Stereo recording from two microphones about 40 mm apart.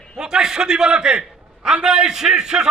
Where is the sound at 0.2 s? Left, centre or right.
Centre.